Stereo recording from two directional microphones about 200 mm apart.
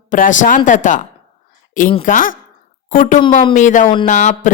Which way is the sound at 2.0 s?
40° left (ahead or behind).